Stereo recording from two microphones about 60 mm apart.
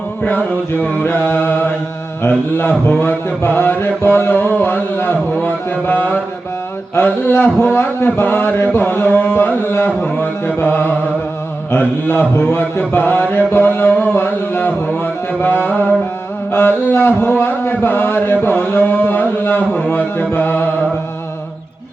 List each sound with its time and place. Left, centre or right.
0.2 s music: left
0.9 s mantra: left